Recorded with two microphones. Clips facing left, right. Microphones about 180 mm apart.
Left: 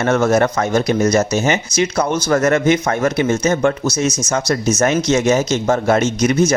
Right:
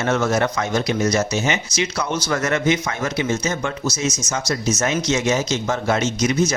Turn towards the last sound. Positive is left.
turn(degrees=55)  # may be behind; listen again after turning